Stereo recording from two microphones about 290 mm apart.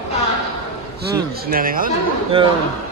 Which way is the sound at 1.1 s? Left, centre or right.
Right.